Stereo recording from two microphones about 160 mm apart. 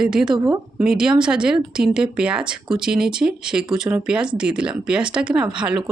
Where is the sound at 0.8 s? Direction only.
5° right (ahead or behind).